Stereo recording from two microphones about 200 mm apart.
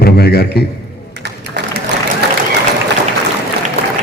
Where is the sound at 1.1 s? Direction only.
55° right (ahead or behind).